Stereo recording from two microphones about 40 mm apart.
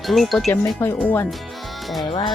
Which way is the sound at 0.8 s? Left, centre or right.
Left.